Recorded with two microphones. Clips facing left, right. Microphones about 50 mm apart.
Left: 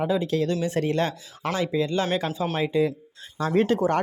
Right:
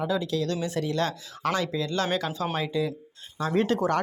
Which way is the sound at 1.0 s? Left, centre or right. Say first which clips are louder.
Left 1 dB; left.